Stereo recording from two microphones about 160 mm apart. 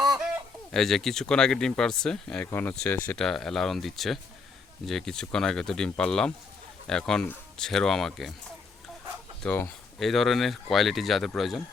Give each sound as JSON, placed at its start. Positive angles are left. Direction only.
{"t": 0.7, "sound": "speech", "side_deg": 0}
{"t": 9.4, "sound": "speech", "side_deg": 10}